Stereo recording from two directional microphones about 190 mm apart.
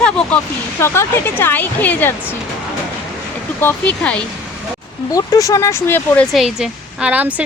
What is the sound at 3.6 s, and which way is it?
Speech, 5° left (ahead or behind).